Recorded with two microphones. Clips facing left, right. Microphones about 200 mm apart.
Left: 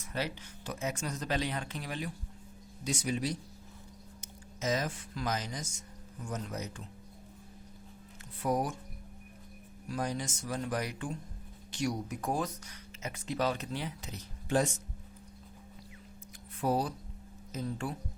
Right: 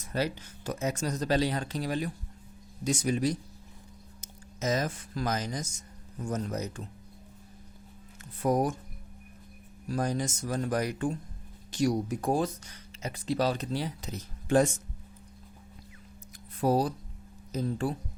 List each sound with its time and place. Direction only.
0.0 s speech: 40° right (ahead or behind)
8.4 s speech: 45° right (ahead or behind)
9.9 s speech: 45° right (ahead or behind)
16.6 s speech: 40° right (ahead or behind)